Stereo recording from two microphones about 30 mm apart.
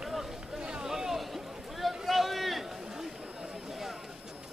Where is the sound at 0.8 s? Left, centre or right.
Centre.